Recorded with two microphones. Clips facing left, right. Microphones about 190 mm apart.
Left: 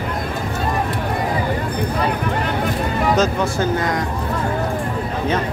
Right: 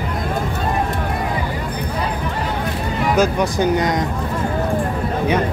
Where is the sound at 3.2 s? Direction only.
15° right (ahead or behind).